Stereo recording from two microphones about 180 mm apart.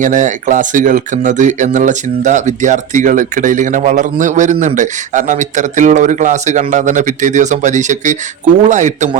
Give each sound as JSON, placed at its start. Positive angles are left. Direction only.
{"t": 0.0, "sound": "a man's voice", "side_deg": -45}